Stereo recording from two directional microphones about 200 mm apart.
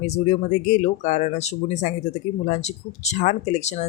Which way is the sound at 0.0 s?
35° left (ahead or behind).